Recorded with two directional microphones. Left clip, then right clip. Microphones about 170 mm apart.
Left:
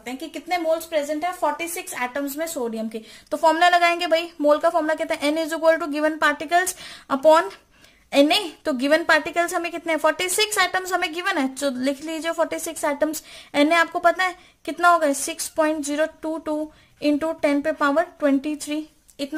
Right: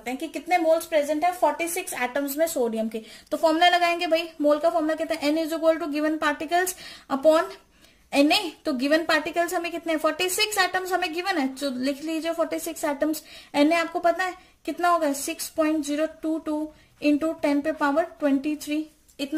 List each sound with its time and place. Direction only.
0.0 s a woman's voice: 20° left (ahead or behind)
3.3 s a woman's voice: 35° left (ahead or behind)